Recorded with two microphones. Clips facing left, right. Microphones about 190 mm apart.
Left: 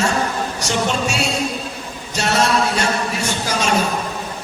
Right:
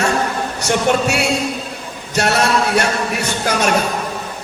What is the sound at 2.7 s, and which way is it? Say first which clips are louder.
Speech: right 3 dB; 60° right (ahead or behind).